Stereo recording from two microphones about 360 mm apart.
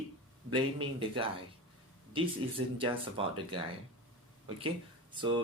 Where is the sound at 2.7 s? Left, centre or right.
Centre.